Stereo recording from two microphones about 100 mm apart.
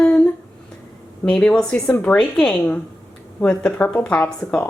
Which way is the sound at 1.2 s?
10° left (ahead or behind).